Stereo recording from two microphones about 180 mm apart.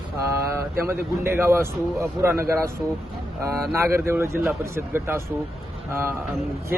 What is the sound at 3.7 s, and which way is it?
Speech, 15° right (ahead or behind).